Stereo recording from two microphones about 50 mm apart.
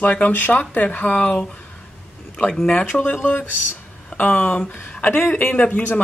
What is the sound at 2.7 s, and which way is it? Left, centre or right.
Speech, left.